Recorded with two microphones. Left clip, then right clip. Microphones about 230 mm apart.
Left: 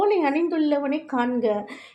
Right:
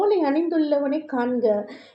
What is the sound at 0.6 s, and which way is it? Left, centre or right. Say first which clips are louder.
Speech: right 1 dB; left.